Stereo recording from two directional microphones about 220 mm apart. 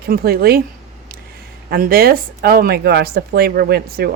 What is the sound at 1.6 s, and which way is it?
Speech, 45° right (ahead or behind).